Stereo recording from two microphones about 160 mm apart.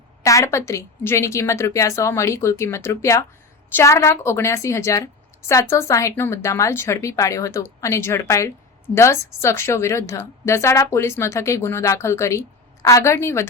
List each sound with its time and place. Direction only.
0.2 s a woman's voice: 20° left (ahead or behind)